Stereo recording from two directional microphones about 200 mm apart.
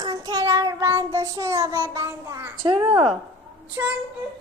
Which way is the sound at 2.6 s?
25° right (ahead or behind).